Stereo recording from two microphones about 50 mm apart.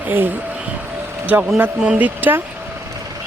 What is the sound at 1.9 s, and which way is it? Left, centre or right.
Speech, right.